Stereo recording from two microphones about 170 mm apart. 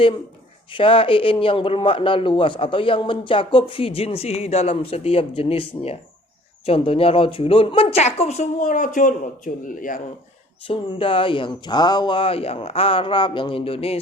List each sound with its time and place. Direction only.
0.7 s speech: 30° left (ahead or behind); by 10.0 s 50° left (ahead or behind)
10.7 s speech: 30° left (ahead or behind)